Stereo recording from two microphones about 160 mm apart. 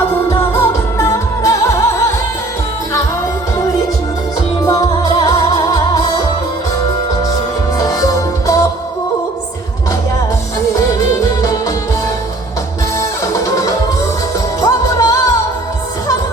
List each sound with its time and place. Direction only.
0.3 s music: 15° left (ahead or behind)
4.6 s music: 20° left (ahead or behind)
7.8 s music: 20° left (ahead or behind)
13.0 s music: 20° left (ahead or behind)